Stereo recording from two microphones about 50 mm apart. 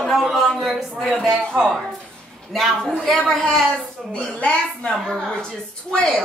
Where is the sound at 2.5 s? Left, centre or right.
Centre.